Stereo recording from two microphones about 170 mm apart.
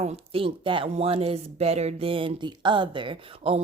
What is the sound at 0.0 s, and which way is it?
A woman's voice, 40° right (ahead or behind).